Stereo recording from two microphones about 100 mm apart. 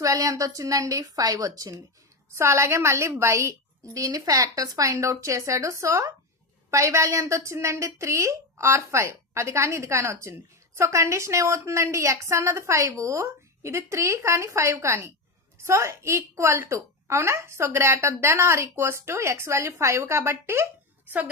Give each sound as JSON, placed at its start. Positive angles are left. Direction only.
{"t": 0.0, "sound": "a woman's voice", "side_deg": -35}